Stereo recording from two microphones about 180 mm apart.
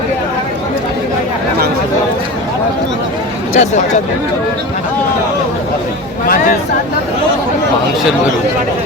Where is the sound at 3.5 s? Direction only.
40° left (ahead or behind).